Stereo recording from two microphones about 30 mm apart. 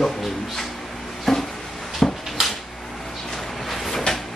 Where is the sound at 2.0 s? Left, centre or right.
Left.